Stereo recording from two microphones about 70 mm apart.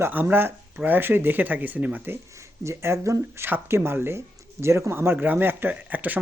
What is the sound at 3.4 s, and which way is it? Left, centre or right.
Speech, right.